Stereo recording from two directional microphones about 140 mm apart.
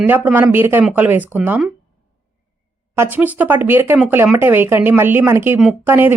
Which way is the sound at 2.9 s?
15° right (ahead or behind).